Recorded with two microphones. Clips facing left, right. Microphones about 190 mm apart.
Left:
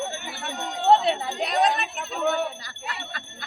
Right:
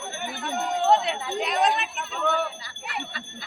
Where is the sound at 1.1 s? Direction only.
35° left (ahead or behind).